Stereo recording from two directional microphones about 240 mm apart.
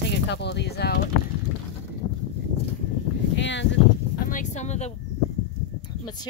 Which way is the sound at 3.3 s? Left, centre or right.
Left.